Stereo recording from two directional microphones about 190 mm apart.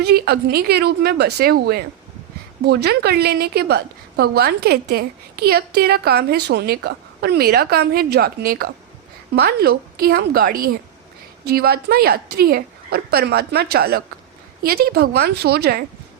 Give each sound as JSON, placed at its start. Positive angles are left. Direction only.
{"t": 0.0, "sound": "a woman's voice", "side_deg": -55}